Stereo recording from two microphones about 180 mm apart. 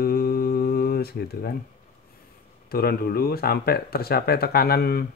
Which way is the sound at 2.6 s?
60° left (ahead or behind).